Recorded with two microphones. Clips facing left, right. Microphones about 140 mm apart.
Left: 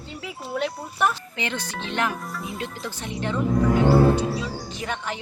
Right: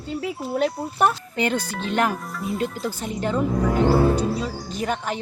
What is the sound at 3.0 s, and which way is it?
Speech, 40° right (ahead or behind).